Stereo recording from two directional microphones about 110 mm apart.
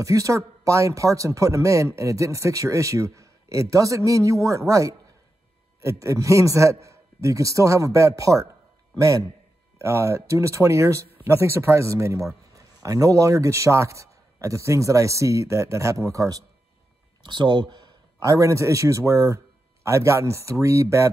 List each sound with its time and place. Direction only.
0.0 s a man's voice: 30° right (ahead or behind)
17.2 s speech: 45° right (ahead or behind)
18.2 s speech: 30° right (ahead or behind)